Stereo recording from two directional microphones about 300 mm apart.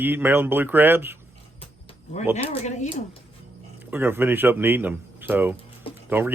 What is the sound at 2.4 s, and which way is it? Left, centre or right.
Speech, left.